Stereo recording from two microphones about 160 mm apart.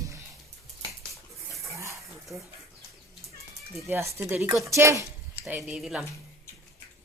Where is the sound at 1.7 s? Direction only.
20° right (ahead or behind).